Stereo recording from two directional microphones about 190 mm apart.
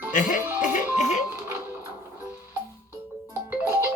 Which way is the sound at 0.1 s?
45° left (ahead or behind).